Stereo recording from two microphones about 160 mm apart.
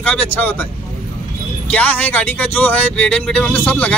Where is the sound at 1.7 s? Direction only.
10° left (ahead or behind).